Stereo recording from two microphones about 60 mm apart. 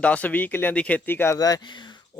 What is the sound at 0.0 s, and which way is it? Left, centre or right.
Speech, left.